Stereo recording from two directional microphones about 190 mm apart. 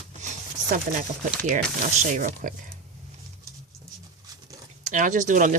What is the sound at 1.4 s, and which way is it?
Speech, 40° right (ahead or behind).